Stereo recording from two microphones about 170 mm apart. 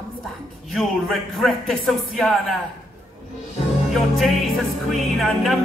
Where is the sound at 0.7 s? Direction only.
Centre (ahead or behind).